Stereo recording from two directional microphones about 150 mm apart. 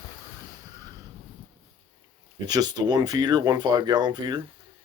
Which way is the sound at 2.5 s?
25° right (ahead or behind).